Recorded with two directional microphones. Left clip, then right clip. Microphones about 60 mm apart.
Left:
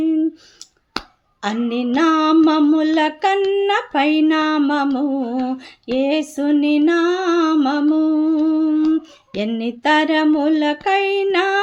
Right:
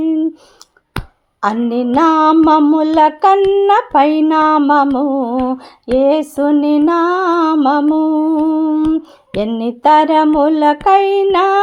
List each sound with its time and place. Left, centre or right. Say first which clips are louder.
1.4 s a sound: right 6 dB; right
3.5 s humming: right 7 dB; right
5.9 s humming: right 7 dB; right
7.5 s mantra: right 5 dB; centre
8.4 s humming: right 3 dB; centre